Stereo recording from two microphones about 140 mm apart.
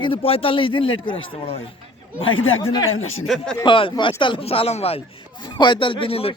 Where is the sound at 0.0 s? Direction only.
40° left (ahead or behind).